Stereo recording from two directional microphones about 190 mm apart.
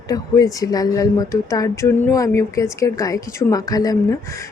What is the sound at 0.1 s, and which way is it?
Speech, 20° left (ahead or behind).